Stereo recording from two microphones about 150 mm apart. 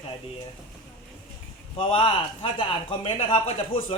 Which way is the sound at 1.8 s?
35° left (ahead or behind).